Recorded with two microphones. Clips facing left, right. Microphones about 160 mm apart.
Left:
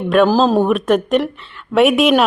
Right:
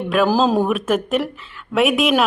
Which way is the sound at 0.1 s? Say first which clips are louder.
Left 4 dB; 5° right (ahead or behind).